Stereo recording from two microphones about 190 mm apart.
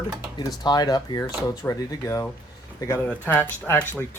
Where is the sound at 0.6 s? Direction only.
20° left (ahead or behind).